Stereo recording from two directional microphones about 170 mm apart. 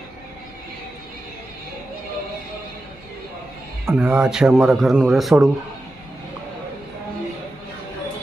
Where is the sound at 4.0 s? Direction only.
5° right (ahead or behind).